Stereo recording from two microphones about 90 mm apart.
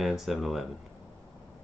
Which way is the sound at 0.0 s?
Centre (ahead or behind).